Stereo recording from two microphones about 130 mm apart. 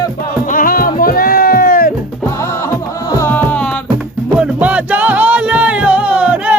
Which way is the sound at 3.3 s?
10° left (ahead or behind).